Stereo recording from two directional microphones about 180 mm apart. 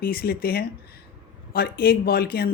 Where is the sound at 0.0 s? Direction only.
55° left (ahead or behind).